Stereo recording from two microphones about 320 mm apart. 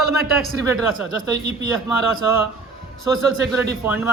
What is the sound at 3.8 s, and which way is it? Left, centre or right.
Speech, centre.